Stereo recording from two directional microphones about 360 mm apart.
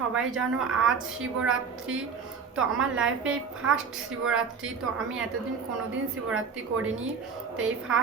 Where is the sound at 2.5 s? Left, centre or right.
Centre.